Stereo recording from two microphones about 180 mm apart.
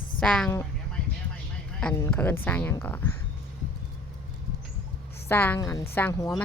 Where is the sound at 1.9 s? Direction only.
10° left (ahead or behind).